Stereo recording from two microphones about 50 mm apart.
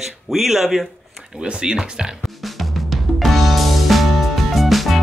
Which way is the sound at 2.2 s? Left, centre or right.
Centre.